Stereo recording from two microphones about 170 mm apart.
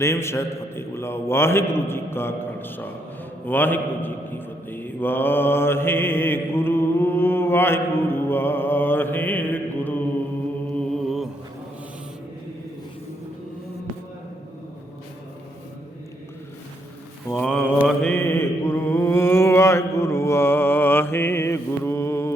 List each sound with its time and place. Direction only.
0.0 s a man's voice: 15° left (ahead or behind)
3.4 s mantra: 10° left (ahead or behind)
17.2 s mantra: 10° left (ahead or behind)